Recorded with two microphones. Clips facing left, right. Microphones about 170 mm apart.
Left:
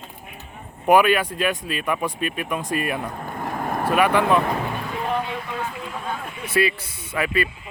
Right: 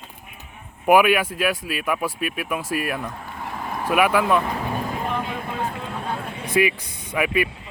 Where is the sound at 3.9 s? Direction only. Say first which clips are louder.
Even; 10° right (ahead or behind).